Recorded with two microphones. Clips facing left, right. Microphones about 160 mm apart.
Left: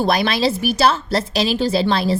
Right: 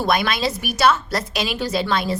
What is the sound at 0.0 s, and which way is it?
A woman's voice, 30° left (ahead or behind).